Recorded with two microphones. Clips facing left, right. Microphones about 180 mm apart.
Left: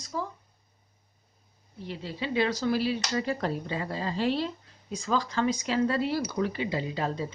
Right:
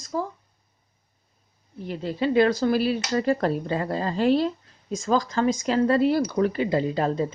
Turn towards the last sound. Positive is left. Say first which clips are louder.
# right 7 dB
turn(degrees=-50)  # may be behind; listen again after turning